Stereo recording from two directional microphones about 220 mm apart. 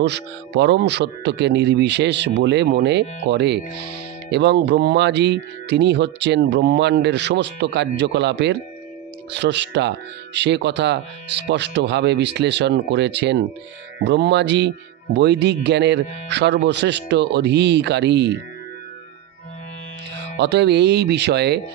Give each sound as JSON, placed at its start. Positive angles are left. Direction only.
{"t": 0.0, "sound": "speech", "side_deg": -50}
{"t": 20.3, "sound": "speech", "side_deg": -50}